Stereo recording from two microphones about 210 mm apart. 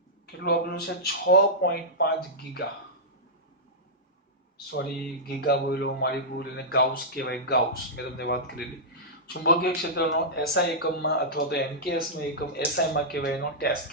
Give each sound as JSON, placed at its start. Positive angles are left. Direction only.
{"t": 0.4, "sound": "speech", "side_deg": 50}
{"t": 4.7, "sound": "speech", "side_deg": 50}